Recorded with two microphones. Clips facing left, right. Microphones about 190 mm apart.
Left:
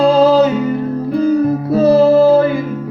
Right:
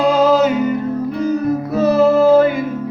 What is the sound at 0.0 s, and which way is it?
Music, 30° left (ahead or behind).